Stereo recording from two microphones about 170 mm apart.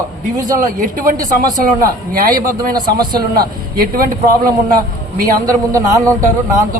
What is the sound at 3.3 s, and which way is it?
Speech, 55° right (ahead or behind).